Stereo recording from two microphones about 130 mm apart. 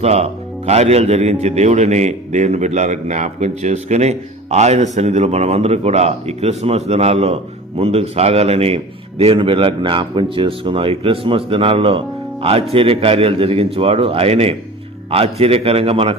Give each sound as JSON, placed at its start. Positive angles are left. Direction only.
{"t": 0.0, "sound": "a man's voice", "side_deg": -55}